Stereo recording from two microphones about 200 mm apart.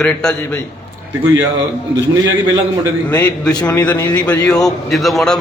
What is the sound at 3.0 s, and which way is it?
A man's voice, 10° left (ahead or behind).